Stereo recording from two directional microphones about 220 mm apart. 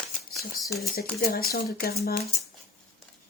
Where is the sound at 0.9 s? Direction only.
45° left (ahead or behind).